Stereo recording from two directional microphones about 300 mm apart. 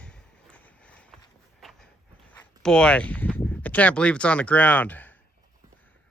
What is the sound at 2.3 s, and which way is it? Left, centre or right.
Speech, centre.